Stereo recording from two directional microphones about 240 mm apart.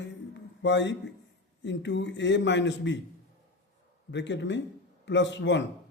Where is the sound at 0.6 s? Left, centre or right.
Left.